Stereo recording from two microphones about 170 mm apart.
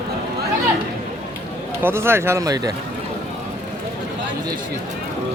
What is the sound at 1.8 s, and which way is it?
Speech, 15° right (ahead or behind).